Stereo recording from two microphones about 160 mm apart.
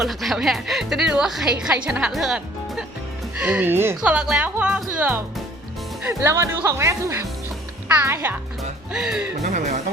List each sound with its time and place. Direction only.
0.0 s a woman's voice: centre (ahead or behind)
8.9 s a woman's voice: 5° right (ahead or behind)
9.4 s speech: 50° right (ahead or behind)